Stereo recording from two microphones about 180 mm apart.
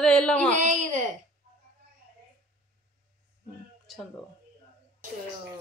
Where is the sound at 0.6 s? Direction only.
45° right (ahead or behind).